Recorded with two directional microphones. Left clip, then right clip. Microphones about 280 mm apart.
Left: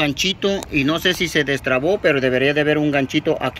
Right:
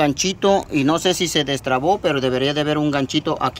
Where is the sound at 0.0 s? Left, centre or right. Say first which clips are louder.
Right 1 dB; centre.